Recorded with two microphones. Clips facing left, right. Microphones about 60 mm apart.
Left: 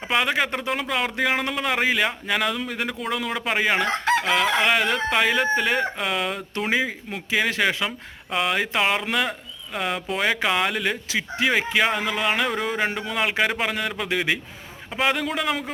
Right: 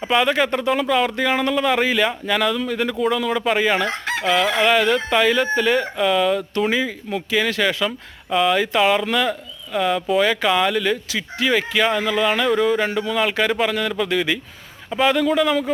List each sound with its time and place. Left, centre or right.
0.0 s a man's voice: centre